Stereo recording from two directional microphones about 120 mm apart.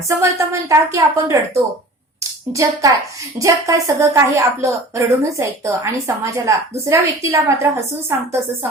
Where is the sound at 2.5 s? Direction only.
25° right (ahead or behind).